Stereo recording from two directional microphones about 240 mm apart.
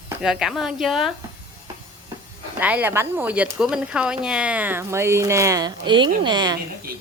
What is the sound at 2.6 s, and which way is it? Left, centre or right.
Speech, centre.